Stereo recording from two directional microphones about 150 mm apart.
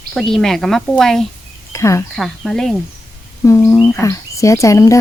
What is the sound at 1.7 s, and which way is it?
Speech, 20° left (ahead or behind).